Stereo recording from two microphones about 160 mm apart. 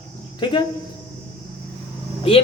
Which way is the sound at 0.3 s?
30° left (ahead or behind).